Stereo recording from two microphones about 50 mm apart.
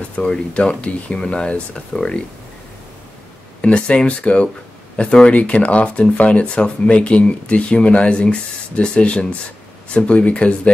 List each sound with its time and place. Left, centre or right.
0.2 s speech: left
3.6 s speech: left